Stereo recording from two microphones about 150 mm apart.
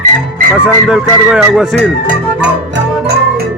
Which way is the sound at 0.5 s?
5° right (ahead or behind).